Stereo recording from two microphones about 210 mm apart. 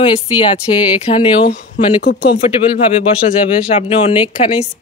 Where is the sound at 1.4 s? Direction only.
50° left (ahead or behind).